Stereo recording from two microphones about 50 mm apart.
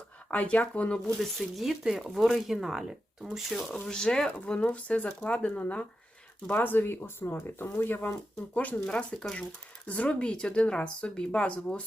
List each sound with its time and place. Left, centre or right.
0.3 s speech: left
1.2 s speech: centre
3.8 s speech: centre
6.5 s speech: left
8.5 s speech: left